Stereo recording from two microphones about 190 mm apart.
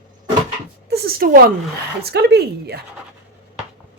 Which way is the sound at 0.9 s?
55° right (ahead or behind).